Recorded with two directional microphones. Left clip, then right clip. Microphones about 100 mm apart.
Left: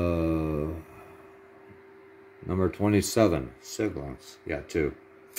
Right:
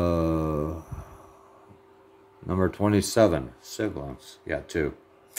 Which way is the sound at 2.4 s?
10° right (ahead or behind).